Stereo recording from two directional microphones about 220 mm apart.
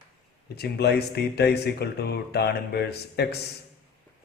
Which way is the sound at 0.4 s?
45° left (ahead or behind).